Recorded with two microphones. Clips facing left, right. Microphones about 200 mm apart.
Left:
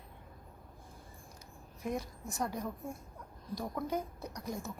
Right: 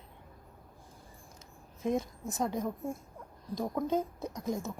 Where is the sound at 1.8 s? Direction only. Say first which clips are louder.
Right 6 dB; 20° right (ahead or behind).